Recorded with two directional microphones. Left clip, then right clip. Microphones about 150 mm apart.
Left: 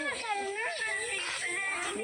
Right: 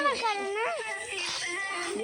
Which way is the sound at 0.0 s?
40° right (ahead or behind).